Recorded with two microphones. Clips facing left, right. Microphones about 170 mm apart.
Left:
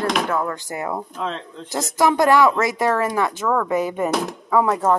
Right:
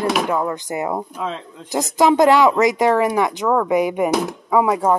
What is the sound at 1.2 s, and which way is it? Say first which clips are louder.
Speech: right 1 dB; 5° right (ahead or behind).